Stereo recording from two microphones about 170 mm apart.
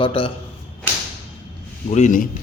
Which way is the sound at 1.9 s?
45° left (ahead or behind).